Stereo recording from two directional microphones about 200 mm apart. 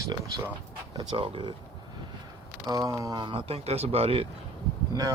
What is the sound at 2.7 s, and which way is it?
Speech, 15° right (ahead or behind).